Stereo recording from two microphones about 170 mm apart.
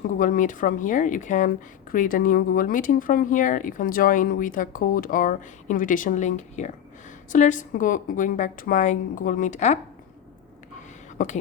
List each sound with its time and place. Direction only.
0.1 s speech: 50° left (ahead or behind)
11.2 s speech: 50° left (ahead or behind)